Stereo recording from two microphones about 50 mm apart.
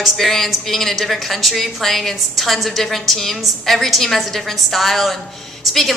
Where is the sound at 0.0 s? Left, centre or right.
Centre.